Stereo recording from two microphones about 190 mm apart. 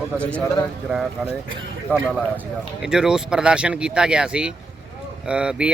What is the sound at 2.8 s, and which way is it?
Speech, 5° right (ahead or behind).